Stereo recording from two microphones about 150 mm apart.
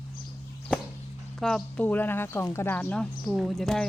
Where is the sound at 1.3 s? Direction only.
5° left (ahead or behind).